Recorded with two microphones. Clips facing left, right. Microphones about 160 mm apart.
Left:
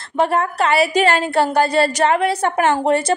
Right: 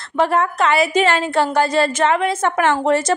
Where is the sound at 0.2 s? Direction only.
35° left (ahead or behind).